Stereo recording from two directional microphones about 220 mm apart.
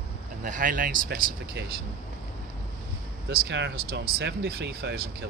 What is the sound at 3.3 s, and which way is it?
Speech, 50° right (ahead or behind).